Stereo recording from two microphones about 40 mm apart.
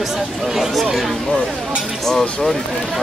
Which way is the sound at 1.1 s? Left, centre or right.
Centre.